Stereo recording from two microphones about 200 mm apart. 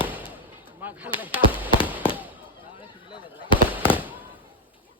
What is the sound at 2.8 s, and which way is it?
Chatter, 25° left (ahead or behind).